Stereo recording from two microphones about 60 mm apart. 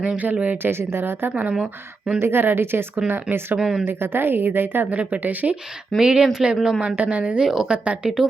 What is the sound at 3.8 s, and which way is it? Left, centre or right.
Speech, right.